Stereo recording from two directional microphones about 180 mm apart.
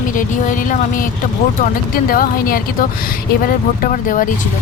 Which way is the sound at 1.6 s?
50° left (ahead or behind).